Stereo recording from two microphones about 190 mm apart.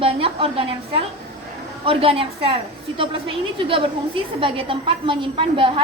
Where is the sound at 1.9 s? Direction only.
30° right (ahead or behind).